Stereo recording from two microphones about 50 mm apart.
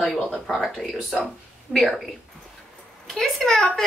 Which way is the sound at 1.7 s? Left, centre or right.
Centre.